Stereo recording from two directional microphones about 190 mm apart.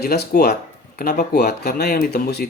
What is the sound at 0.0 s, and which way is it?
Speech, 55° left (ahead or behind).